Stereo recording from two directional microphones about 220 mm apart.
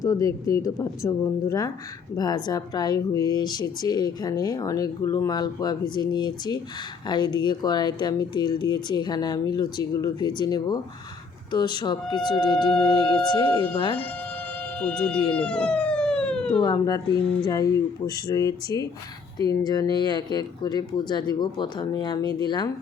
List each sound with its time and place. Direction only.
0.0 s speech: 15° left (ahead or behind)
14.8 s speech: 5° left (ahead or behind)
15.4 s emergency vehicle: 5° left (ahead or behind)
16.6 s speech: 20° left (ahead or behind)